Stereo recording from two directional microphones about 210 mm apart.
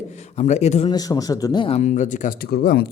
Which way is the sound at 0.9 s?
20° left (ahead or behind).